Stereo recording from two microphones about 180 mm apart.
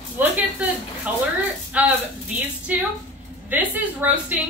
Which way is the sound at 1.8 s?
5° right (ahead or behind).